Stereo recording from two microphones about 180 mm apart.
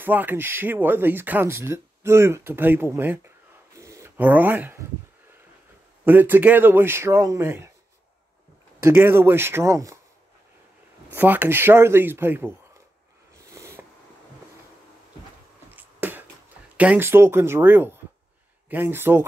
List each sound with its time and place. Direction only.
0.0 s speech: 10° right (ahead or behind)
3.7 s a sound: 15° right (ahead or behind)
6.0 s speech: 10° right (ahead or behind)
8.7 s speech: 10° right (ahead or behind)
11.1 s speech: 10° right (ahead or behind)
13.4 s a sound: 15° right (ahead or behind)
15.7 s finger snapping: 10° right (ahead or behind)
16.7 s speech: 10° right (ahead or behind)